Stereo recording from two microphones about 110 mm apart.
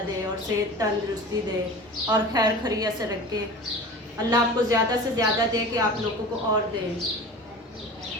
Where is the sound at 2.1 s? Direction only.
35° right (ahead or behind).